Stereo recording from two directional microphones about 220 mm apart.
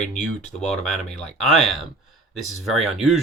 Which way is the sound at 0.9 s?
5° left (ahead or behind).